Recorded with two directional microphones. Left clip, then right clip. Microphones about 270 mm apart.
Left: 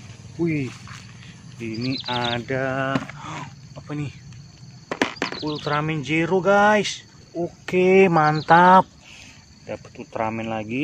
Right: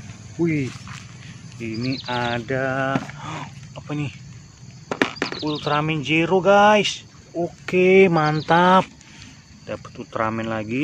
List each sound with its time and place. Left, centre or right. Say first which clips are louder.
0.4 s speech: right 2 dB; centre
1.8 s speech: even; left
2.0 s speech: right 1 dB; centre
4.8 s a sound: right 1 dB; centre
5.4 s speech: right 3 dB; centre